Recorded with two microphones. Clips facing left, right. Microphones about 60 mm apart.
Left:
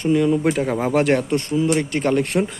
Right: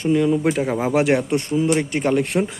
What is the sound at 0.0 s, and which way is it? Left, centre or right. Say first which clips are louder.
Speech: even; centre.